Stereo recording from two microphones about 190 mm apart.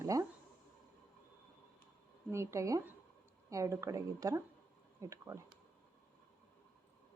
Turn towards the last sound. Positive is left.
turn(degrees=-15)  # may be behind; listen again after turning